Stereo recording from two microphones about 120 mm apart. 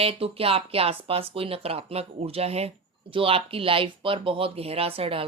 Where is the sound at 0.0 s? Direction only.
50° right (ahead or behind).